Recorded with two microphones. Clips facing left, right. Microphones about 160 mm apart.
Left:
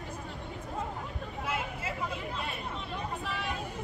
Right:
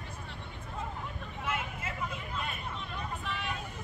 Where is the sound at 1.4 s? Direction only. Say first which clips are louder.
Left 1 dB; 35° left (ahead or behind).